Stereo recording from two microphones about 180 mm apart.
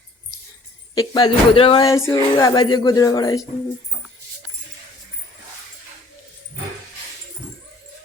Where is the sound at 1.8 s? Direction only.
15° left (ahead or behind).